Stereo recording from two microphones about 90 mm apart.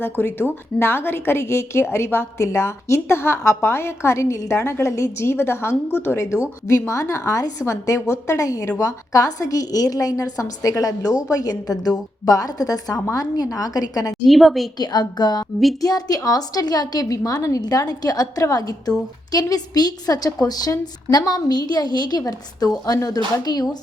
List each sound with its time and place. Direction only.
0.0 s a woman's voice: 25° left (ahead or behind); by 14.2 s 45° left (ahead or behind)
14.3 s a woman's voice: centre (ahead or behind)
14.8 s a woman's voice: 50° left (ahead or behind)